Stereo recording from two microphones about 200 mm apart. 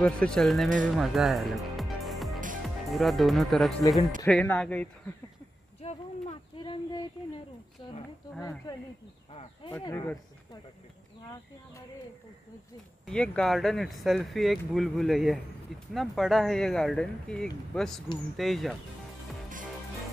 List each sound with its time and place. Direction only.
0.0 s speech: 5° left (ahead or behind)
0.8 s music: centre (ahead or behind)
2.6 s speech: centre (ahead or behind)
5.8 s speech: 30° left (ahead or behind); by 8.7 s 15° left (ahead or behind)
9.3 s speech: 30° left (ahead or behind)
9.7 s speech: 15° left (ahead or behind)
13.0 s speech: 5° left (ahead or behind)